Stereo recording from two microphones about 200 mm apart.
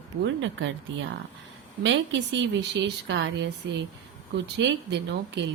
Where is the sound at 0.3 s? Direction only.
70° right (ahead or behind).